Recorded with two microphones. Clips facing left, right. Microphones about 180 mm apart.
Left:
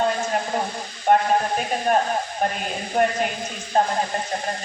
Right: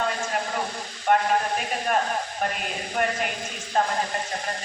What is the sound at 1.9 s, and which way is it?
A man's voice, 35° left (ahead or behind).